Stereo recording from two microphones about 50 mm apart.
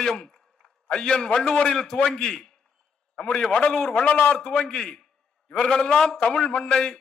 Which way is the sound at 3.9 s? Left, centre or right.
Left.